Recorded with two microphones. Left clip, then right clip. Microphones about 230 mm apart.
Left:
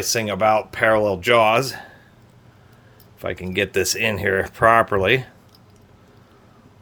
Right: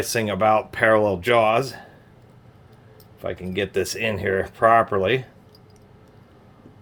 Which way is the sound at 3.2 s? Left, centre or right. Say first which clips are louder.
Left 3 dB; left.